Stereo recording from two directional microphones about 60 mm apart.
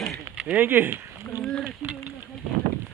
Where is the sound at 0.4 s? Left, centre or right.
Right.